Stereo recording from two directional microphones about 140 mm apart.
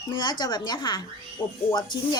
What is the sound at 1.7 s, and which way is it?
Speech, 30° left (ahead or behind).